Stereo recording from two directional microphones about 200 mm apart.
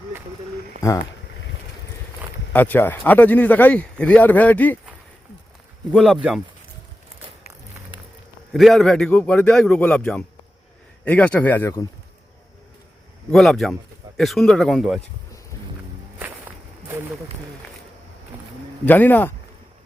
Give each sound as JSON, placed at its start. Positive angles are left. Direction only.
{"t": 0.8, "sound": "speech", "side_deg": 15}
{"t": 2.5, "sound": "speech", "side_deg": 10}
{"t": 5.9, "sound": "a man's voice", "side_deg": 0}
{"t": 8.5, "sound": "a man's voice", "side_deg": 0}
{"t": 13.3, "sound": "a man's voice", "side_deg": 0}
{"t": 18.9, "sound": "speech", "side_deg": 10}